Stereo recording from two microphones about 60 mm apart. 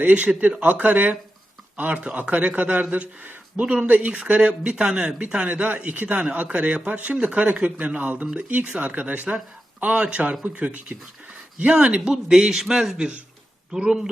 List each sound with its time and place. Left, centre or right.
0.0 s a man's voice: right; by 14.1 s centre